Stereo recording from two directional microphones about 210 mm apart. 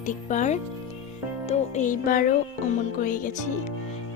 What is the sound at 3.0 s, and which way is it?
Speech, 40° left (ahead or behind).